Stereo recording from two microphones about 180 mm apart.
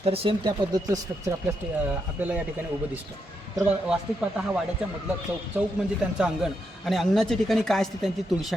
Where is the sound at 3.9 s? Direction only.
5° right (ahead or behind).